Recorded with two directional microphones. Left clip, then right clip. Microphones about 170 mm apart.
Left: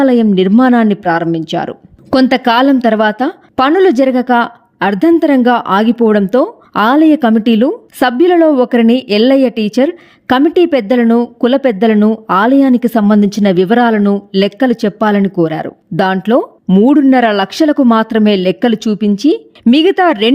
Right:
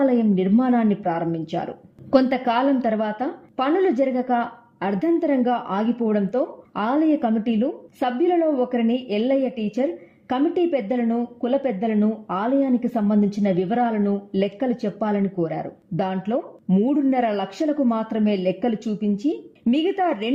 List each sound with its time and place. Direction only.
0.0 s speech: 35° left (ahead or behind)